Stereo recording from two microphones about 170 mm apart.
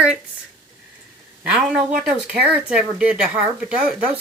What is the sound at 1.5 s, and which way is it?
Speech, 5° right (ahead or behind).